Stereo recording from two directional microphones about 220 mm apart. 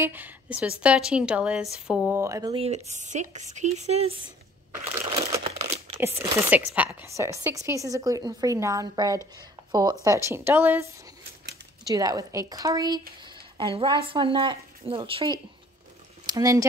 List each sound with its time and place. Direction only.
0.0 s a woman's voice: 10° right (ahead or behind); by 4.1 s 30° right (ahead or behind)
5.1 s crumpling: 25° right (ahead or behind)
5.7 s crumpling: 10° right (ahead or behind)
6.3 s a woman's voice: 5° right (ahead or behind)
11.9 s a woman's voice: 15° right (ahead or behind)